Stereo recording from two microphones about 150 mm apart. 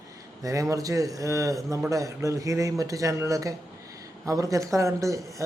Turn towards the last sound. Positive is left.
turn(degrees=-20)  # may be behind; listen again after turning